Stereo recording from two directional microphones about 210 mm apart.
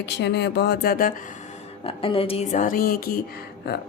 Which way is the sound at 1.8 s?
25° left (ahead or behind).